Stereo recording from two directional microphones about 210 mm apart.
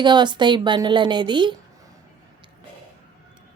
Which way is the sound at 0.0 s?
20° right (ahead or behind).